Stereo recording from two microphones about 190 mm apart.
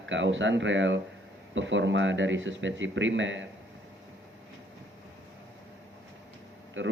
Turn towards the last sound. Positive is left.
turn(degrees=-90)